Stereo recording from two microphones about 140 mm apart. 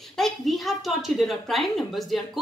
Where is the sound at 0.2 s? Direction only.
Centre (ahead or behind).